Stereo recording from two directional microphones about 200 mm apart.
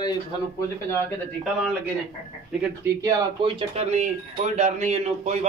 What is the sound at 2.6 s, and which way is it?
A man's voice, 15° right (ahead or behind).